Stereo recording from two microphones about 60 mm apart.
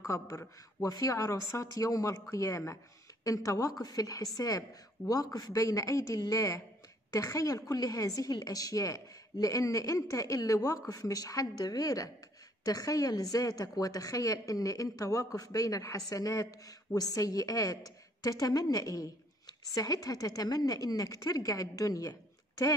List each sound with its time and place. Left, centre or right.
0.0 s a man's voice: left
3.8 s a woman's voice: left